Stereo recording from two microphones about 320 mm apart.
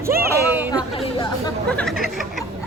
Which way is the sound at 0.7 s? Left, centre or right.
Centre.